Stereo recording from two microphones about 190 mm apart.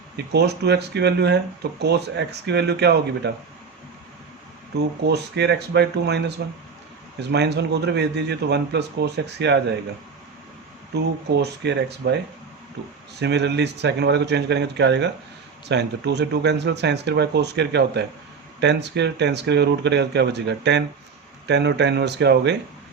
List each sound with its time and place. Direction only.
0.3 s a man's voice: 60° right (ahead or behind)
5.0 s a man's voice: 60° right (ahead or behind)
10.9 s a man's voice: 60° right (ahead or behind)